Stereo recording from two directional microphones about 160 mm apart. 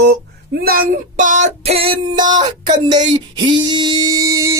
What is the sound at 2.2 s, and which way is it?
Speech, 25° right (ahead or behind).